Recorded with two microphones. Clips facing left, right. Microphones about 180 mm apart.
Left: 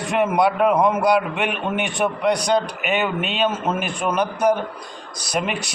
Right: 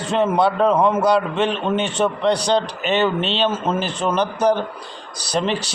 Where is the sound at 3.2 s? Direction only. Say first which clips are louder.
Right 3 dB; 30° right (ahead or behind).